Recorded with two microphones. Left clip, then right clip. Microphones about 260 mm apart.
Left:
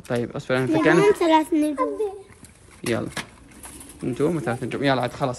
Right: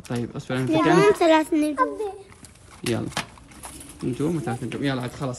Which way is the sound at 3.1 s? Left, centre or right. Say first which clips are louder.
Right 2 dB; centre.